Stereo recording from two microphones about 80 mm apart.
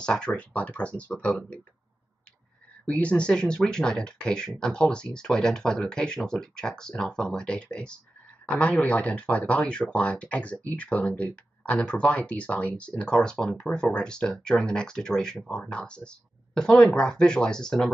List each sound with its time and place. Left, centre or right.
0.0 s speech: centre
2.9 s speech: centre